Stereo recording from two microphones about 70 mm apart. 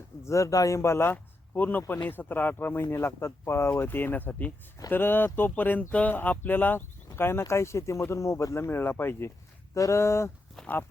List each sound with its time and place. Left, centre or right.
0.3 s speech: left
9.7 s speech: left